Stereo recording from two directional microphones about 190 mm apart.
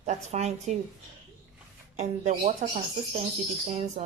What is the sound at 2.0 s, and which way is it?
Speech, 35° right (ahead or behind).